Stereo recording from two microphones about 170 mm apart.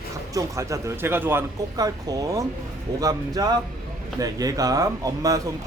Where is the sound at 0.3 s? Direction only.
20° right (ahead or behind).